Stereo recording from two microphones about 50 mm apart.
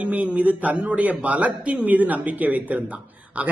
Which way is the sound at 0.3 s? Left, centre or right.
Right.